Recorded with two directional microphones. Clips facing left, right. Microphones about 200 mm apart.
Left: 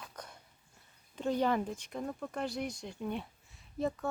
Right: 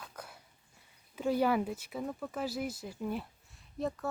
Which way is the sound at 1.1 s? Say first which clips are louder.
Right 2 dB; 5° right (ahead or behind).